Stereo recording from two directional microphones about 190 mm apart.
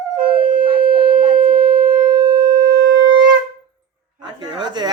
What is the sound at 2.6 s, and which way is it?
Shofar, 50° right (ahead or behind).